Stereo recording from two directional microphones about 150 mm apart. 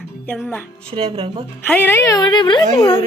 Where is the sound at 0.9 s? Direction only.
40° right (ahead or behind).